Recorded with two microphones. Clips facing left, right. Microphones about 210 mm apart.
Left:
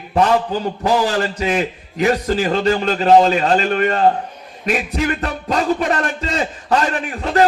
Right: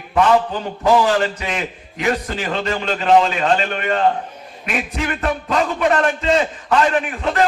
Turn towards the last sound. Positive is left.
turn(degrees=35)  # may be behind; listen again after turning